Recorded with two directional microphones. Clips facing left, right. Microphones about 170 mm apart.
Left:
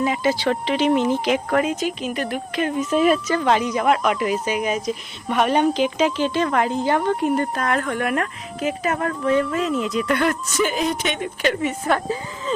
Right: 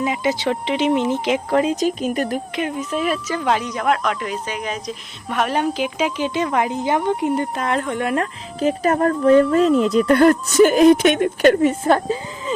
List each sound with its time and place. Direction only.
0.0 s speech: 15° right (ahead or behind)
1.7 s speech: 40° right (ahead or behind)
2.7 s speech: centre (ahead or behind); by 11.7 s 50° right (ahead or behind)
11.7 s speech: 30° right (ahead or behind)